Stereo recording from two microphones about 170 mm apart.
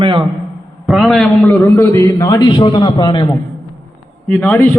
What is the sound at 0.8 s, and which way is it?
A man's voice, centre (ahead or behind).